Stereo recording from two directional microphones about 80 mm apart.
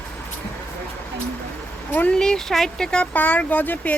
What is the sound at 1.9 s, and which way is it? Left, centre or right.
Speech, left.